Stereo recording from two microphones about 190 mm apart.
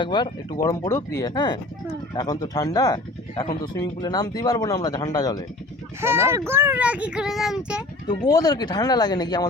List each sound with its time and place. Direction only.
0.0 s speech: 25° left (ahead or behind)
6.0 s speech: 15° right (ahead or behind)
8.3 s speech: 20° left (ahead or behind)